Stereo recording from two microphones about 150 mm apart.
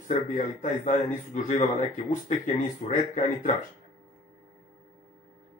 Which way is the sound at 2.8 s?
55° left (ahead or behind).